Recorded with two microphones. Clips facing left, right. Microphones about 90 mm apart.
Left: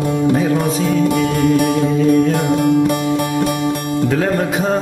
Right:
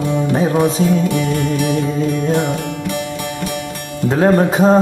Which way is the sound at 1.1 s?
50° left (ahead or behind).